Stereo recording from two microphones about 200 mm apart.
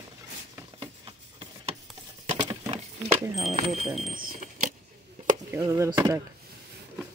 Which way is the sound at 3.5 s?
30° right (ahead or behind).